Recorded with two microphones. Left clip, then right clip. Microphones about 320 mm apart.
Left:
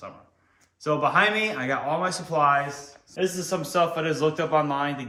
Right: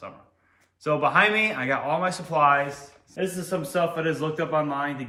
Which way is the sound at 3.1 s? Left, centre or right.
Centre.